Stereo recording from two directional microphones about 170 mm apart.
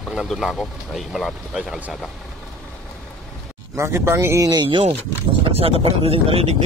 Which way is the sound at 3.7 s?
15° right (ahead or behind).